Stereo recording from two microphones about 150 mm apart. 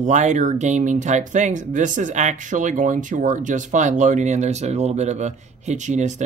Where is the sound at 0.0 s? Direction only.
50° right (ahead or behind).